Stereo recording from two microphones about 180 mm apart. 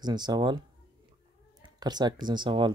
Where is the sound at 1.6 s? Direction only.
25° right (ahead or behind).